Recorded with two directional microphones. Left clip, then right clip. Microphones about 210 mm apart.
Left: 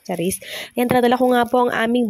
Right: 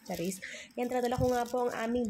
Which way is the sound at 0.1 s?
45° left (ahead or behind).